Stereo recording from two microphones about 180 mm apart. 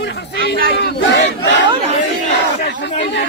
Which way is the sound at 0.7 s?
65° left (ahead or behind).